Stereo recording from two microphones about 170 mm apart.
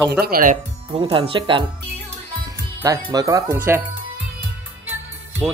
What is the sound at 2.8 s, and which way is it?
Speech, 20° right (ahead or behind).